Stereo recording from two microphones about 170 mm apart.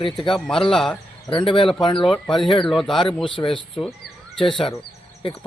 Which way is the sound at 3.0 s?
30° left (ahead or behind).